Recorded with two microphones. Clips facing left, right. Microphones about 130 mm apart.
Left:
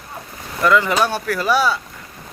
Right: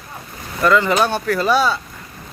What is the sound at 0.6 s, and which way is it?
Speech, 10° left (ahead or behind).